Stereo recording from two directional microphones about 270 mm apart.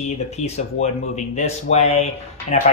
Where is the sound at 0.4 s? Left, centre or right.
Left.